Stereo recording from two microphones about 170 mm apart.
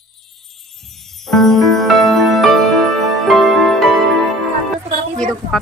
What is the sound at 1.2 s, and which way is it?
Music, centre (ahead or behind).